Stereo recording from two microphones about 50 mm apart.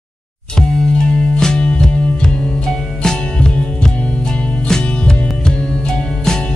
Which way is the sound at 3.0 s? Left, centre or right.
Centre.